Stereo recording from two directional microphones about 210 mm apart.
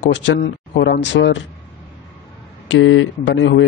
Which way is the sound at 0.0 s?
60° left (ahead or behind).